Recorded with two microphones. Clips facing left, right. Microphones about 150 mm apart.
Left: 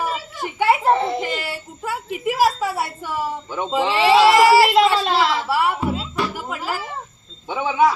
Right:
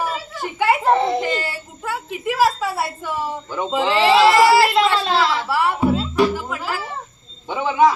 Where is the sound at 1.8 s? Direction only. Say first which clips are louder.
Left 1 dB; 10° left (ahead or behind).